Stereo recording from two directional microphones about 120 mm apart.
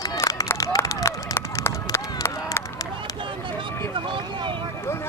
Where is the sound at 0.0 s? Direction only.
30° left (ahead or behind).